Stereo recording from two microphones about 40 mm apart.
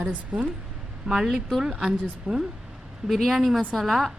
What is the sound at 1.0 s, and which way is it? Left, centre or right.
A woman's voice, centre.